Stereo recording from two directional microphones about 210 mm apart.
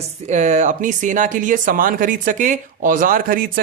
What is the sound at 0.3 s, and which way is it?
Speech, 35° right (ahead or behind).